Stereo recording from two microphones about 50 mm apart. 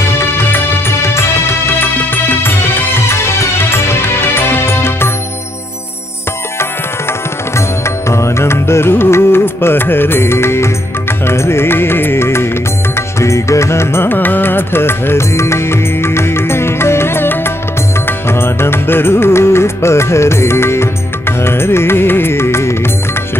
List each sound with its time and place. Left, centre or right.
0.2 s music: left
3.1 s music: left
7.5 s music: left
12.9 s music: left
14.0 s music: left